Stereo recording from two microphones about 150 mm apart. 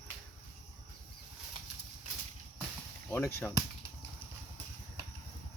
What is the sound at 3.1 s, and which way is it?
Chop, 20° left (ahead or behind).